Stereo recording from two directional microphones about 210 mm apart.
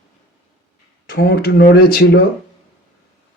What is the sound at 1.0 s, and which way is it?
Speech, 45° left (ahead or behind).